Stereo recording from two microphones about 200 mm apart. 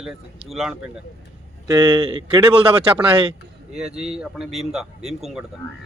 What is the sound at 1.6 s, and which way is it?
Speech, 20° right (ahead or behind).